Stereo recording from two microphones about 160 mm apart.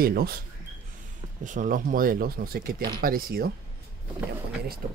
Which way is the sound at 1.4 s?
55° right (ahead or behind).